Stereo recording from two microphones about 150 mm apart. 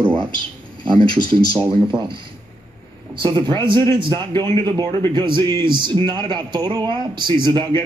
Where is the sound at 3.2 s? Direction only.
30° right (ahead or behind).